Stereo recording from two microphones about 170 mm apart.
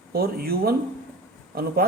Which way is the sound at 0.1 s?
65° right (ahead or behind).